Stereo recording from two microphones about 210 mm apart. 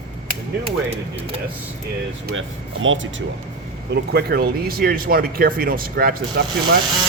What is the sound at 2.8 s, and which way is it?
Speech, 65° right (ahead or behind).